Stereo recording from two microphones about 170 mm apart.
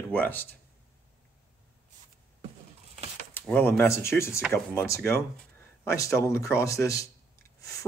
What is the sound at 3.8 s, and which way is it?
Speech, 15° left (ahead or behind).